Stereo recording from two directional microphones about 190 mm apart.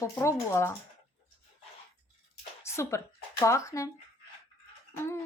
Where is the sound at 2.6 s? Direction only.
15° left (ahead or behind).